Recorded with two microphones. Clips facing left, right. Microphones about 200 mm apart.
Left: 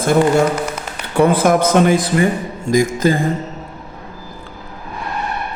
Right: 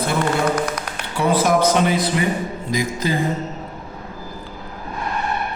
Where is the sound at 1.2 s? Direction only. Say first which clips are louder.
Left 4 dB; 55° left (ahead or behind).